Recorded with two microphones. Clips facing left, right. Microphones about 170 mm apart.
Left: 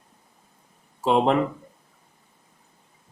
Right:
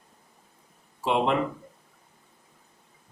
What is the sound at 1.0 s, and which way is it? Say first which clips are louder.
Speech: left 4 dB; 40° left (ahead or behind).